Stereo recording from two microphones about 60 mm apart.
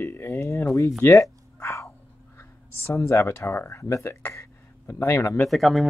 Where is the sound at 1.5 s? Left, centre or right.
Left.